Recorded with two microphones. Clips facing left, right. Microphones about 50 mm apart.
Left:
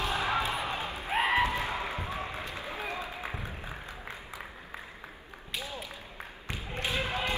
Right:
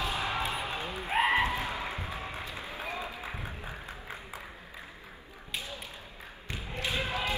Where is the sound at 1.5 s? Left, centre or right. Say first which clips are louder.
Left 1 dB; left.